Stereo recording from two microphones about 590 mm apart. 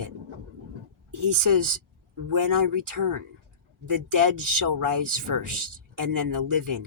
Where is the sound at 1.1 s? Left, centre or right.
Right.